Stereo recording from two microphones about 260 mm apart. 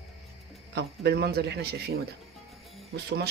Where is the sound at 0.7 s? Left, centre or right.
Right.